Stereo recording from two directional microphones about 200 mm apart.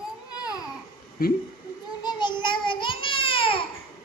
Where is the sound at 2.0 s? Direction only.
20° left (ahead or behind).